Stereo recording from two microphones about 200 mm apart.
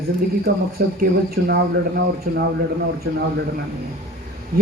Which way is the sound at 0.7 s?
50° right (ahead or behind).